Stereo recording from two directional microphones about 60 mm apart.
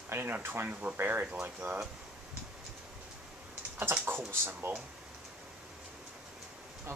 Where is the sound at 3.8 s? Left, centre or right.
Right.